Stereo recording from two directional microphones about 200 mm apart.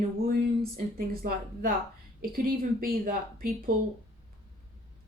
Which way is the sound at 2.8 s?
45° right (ahead or behind).